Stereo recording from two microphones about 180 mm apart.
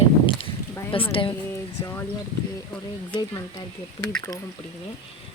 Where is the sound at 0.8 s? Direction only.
25° left (ahead or behind).